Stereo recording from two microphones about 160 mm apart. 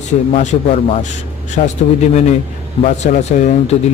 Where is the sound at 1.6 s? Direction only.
55° left (ahead or behind).